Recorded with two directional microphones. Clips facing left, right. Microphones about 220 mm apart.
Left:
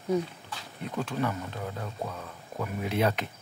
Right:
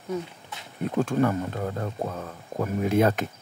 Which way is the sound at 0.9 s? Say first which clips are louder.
Right 7 dB; 50° right (ahead or behind).